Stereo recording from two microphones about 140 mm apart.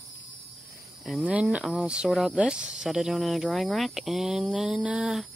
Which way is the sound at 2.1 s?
5° left (ahead or behind).